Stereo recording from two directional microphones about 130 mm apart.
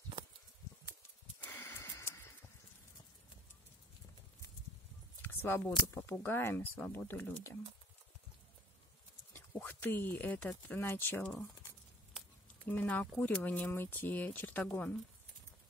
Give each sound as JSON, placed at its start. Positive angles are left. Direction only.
{"t": 1.4, "sound": "wheeze", "side_deg": 15}
{"t": 5.2, "sound": "speech", "side_deg": 15}
{"t": 9.5, "sound": "speech", "side_deg": 15}
{"t": 12.6, "sound": "speech", "side_deg": 10}